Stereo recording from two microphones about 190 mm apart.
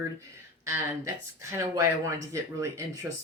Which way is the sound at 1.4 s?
15° right (ahead or behind).